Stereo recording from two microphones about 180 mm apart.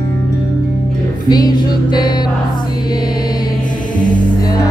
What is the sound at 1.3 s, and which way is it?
Music, 20° left (ahead or behind).